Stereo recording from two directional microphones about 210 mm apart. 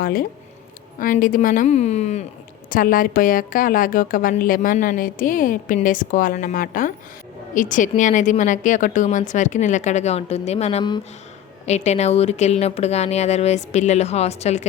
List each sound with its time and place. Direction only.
0.0 s a woman's voice: 45° left (ahead or behind)